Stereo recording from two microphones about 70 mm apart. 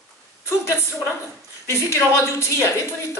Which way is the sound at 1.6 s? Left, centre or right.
Left.